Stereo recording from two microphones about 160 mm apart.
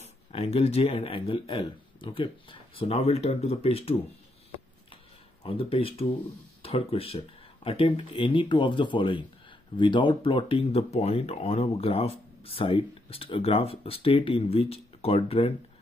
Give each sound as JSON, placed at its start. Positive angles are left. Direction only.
{"t": 0.0, "sound": "speech", "side_deg": 40}
{"t": 5.4, "sound": "speech", "side_deg": 35}